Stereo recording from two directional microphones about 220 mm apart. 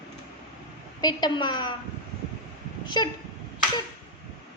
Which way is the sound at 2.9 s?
20° left (ahead or behind).